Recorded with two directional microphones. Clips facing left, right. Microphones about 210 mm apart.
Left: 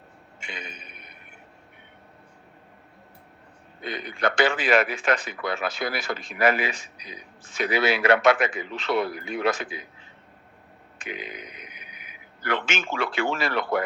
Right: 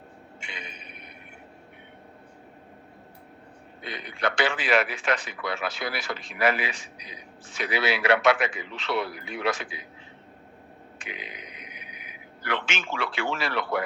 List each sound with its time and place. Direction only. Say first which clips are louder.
0.4 s a sound: left 4 dB; 45° left (ahead or behind)
3.8 s a man's voice: left 3 dB; 45° left (ahead or behind)
11.0 s a man's voice: left 5 dB; 45° left (ahead or behind)